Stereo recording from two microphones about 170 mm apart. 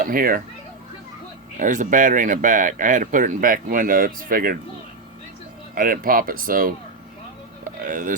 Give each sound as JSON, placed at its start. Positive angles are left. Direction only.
{"t": 0.0, "sound": "a child's voice", "side_deg": -55}
{"t": 1.5, "sound": "speech", "side_deg": -50}
{"t": 5.7, "sound": "speech", "side_deg": -55}